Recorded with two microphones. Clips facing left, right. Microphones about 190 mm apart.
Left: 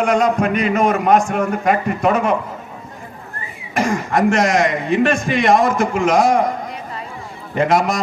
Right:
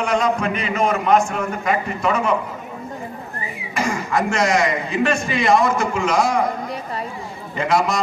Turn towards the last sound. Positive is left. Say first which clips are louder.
# left 3 dB
turn(degrees=45)  # may be behind; listen again after turning